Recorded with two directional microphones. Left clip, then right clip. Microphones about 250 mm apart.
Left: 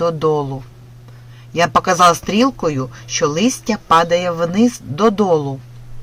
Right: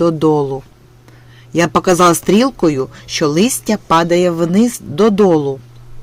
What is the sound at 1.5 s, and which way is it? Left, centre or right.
Speech, right.